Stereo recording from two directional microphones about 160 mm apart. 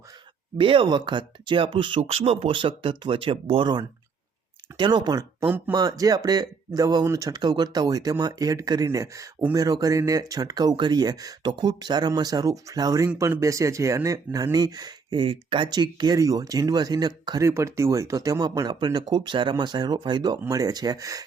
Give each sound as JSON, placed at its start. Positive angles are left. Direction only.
{"t": 0.6, "sound": "speech", "side_deg": -35}
{"t": 5.4, "sound": "speech", "side_deg": -10}
{"t": 5.7, "sound": "speech", "side_deg": -25}